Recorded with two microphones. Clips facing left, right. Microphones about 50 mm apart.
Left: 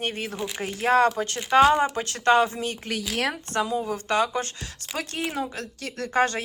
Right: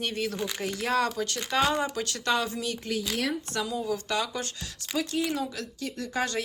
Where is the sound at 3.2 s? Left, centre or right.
Left.